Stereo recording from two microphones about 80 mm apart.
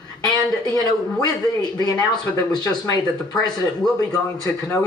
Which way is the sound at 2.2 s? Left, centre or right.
Left.